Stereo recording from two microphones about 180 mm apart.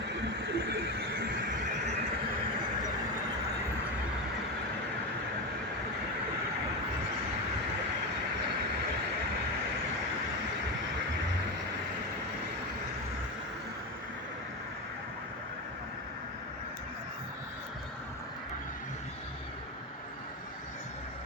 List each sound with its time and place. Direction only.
0.4 s neigh: 65° right (ahead or behind)